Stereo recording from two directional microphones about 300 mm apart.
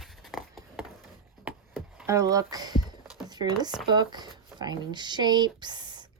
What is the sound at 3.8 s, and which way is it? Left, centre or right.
Speech, centre.